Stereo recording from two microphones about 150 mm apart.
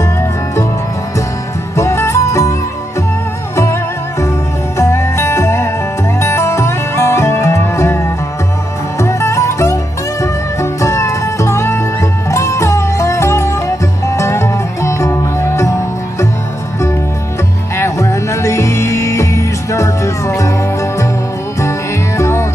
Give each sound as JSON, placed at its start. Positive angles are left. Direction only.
{"t": 1.8, "sound": "music", "side_deg": 20}
{"t": 4.7, "sound": "music", "side_deg": 20}
{"t": 17.7, "sound": "music", "side_deg": 20}
{"t": 21.5, "sound": "music", "side_deg": 20}